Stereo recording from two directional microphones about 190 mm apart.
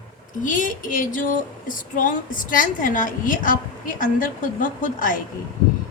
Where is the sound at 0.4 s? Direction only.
45° left (ahead or behind).